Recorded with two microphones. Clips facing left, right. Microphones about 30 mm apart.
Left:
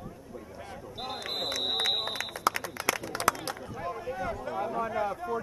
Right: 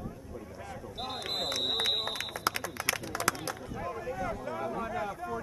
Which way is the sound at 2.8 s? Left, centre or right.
Right.